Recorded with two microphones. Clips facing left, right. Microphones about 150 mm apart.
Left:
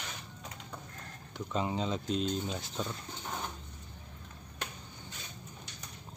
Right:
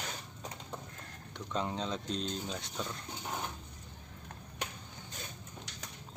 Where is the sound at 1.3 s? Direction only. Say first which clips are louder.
Left 2 dB; 5° left (ahead or behind).